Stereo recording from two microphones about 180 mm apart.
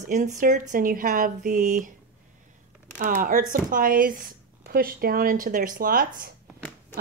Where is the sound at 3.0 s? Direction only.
50° right (ahead or behind).